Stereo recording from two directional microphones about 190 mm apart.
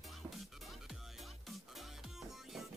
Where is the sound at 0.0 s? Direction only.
Centre (ahead or behind).